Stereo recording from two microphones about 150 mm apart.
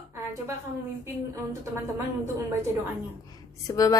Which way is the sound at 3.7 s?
20° left (ahead or behind).